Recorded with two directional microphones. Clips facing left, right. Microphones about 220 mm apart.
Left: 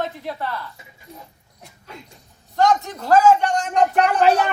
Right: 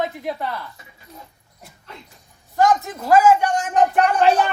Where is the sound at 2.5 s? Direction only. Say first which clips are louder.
Right 1 dB; 5° right (ahead or behind).